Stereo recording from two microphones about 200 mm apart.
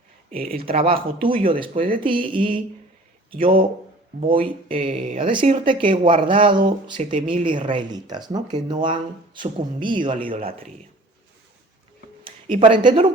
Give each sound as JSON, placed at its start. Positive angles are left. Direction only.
{"t": 0.3, "sound": "speech", "side_deg": -45}
{"t": 0.8, "sound": "speech", "side_deg": -25}
{"t": 1.2, "sound": "speech", "side_deg": -45}
{"t": 1.5, "sound": "speech", "side_deg": -25}
{"t": 4.3, "sound": "speech", "side_deg": -25}
{"t": 12.2, "sound": "speech", "side_deg": -25}